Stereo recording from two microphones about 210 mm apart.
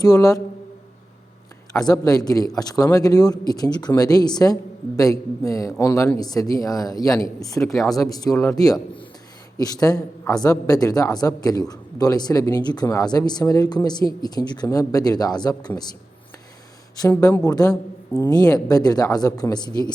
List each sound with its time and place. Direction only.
0.0 s speech: 15° left (ahead or behind)
1.7 s speech: 15° left (ahead or behind)
7.7 s speech: centre (ahead or behind)
7.9 s speech: 15° left (ahead or behind)
17.0 s speech: 15° left (ahead or behind)